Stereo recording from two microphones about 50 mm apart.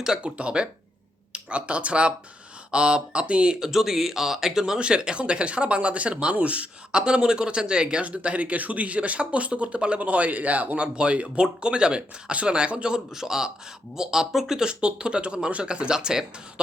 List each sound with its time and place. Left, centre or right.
0.2 s speech: right
3.7 s speech: centre